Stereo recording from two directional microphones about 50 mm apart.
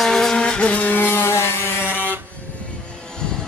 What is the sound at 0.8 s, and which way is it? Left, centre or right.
Vehicle, left.